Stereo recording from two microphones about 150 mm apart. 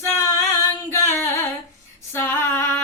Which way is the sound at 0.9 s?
15° left (ahead or behind).